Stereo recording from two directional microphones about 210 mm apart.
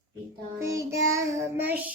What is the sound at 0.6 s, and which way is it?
Child singing, 15° right (ahead or behind).